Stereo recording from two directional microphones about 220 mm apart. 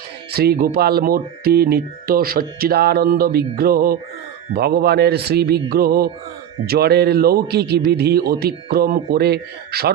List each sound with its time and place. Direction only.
0.3 s speech: 45° right (ahead or behind)